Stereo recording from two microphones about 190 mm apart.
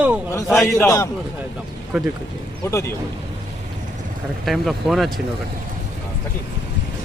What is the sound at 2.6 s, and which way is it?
Speech, 15° left (ahead or behind).